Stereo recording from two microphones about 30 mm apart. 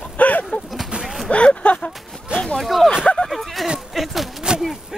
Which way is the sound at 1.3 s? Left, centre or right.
Left.